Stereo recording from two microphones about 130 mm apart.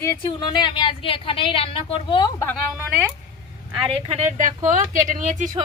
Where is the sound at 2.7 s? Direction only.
15° right (ahead or behind).